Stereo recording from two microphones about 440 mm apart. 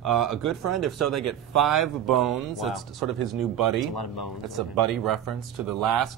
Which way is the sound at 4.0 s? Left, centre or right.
Left.